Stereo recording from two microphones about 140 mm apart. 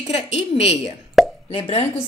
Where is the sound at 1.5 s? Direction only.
45° left (ahead or behind).